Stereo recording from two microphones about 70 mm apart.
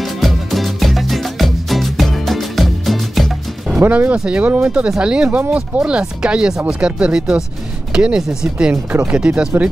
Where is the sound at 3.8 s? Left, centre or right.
Right.